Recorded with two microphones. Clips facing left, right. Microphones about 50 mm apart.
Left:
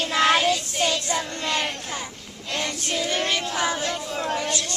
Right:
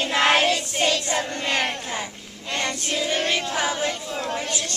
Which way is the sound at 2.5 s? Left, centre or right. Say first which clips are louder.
Right 1 dB; centre.